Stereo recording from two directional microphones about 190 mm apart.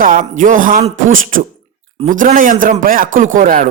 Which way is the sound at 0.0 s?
45° right (ahead or behind).